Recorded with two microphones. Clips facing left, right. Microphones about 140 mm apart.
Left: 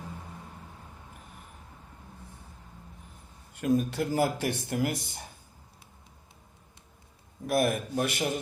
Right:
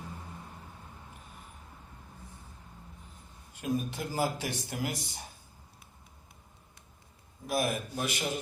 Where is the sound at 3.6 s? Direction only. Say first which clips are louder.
Left 6 dB; 70° left (ahead or behind); by 5.2 s 55° left (ahead or behind).